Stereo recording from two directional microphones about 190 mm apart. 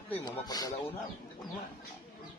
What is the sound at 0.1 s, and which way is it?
Speech, 20° left (ahead or behind).